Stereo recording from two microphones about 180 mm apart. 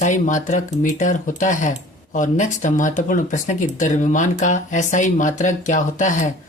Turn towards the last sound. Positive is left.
turn(degrees=45)  # may be behind; listen again after turning